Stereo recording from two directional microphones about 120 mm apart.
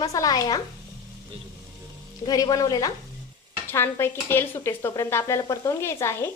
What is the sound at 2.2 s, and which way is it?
Speech, 30° left (ahead or behind).